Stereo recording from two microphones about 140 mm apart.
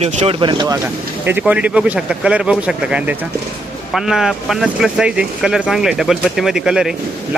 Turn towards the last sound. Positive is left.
turn(degrees=-5)  # may be behind; listen again after turning